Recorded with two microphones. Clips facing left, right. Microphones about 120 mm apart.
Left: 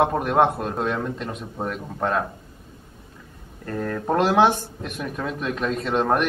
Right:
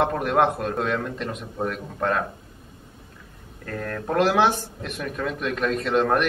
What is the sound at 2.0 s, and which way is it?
Speech, 20° left (ahead or behind).